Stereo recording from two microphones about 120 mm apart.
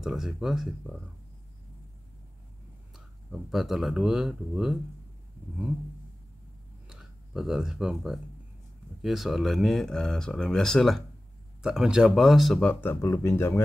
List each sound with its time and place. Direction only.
0.0 s speech: 5° right (ahead or behind)
3.3 s speech: centre (ahead or behind)
6.9 s speech: 5° right (ahead or behind)
12.8 s speech: 25° left (ahead or behind)